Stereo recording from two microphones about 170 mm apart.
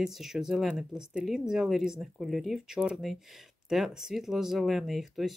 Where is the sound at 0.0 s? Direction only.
Centre (ahead or behind).